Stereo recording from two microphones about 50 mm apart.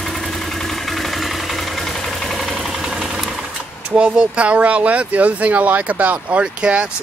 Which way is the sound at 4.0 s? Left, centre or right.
Right.